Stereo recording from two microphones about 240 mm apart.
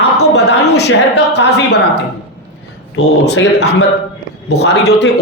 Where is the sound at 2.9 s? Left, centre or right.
Left.